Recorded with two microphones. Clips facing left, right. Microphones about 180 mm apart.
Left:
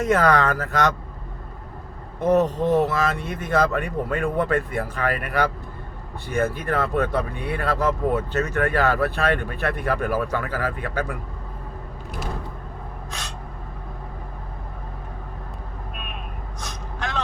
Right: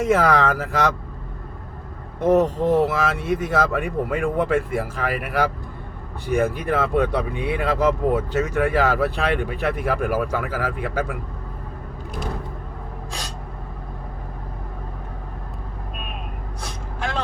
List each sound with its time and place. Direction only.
0.0 s speech: 5° right (ahead or behind)
2.2 s speech: 10° right (ahead or behind)
13.1 s gasp: 35° right (ahead or behind)